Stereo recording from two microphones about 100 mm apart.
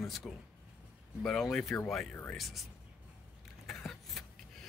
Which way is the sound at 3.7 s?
Centre (ahead or behind).